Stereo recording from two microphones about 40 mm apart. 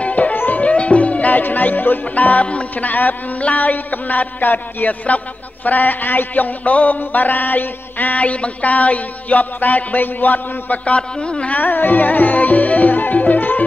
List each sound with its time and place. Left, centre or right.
0.0 s music: left
0.7 s music: left
1.4 s speech: left
11.0 s a man's voice: left
11.5 s music: left